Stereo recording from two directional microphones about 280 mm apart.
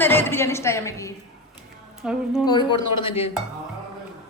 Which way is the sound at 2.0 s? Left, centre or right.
Centre.